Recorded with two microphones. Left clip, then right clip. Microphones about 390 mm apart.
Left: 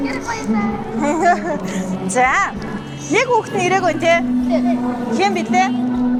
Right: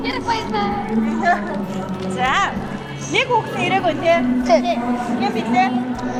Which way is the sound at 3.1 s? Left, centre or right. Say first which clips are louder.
Left 2 dB; left.